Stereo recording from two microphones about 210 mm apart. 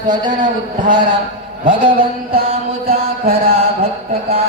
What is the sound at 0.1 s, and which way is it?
Mantra, 20° right (ahead or behind).